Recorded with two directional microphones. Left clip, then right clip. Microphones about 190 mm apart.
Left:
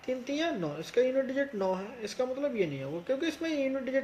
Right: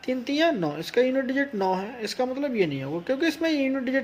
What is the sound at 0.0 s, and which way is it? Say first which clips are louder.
Speech: right 8 dB; 50° right (ahead or behind).